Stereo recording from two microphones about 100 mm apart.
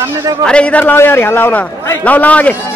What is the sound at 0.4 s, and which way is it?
A man's voice, 10° left (ahead or behind).